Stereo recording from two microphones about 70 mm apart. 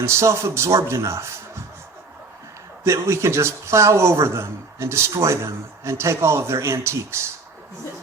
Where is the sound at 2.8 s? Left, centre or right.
Right.